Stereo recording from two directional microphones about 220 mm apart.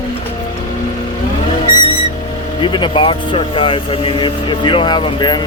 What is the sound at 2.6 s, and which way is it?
Speech, 20° left (ahead or behind).